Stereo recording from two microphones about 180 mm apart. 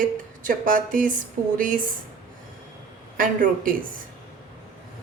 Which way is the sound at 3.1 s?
50° right (ahead or behind).